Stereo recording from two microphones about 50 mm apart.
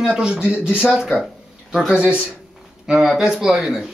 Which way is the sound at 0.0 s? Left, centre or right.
Centre.